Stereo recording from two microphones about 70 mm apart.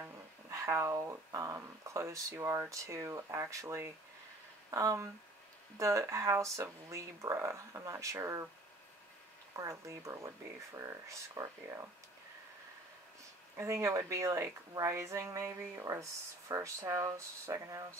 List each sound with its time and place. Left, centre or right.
0.5 s speech: right
4.6 s speech: right
5.8 s speech: right
9.6 s speech: right
13.6 s speech: right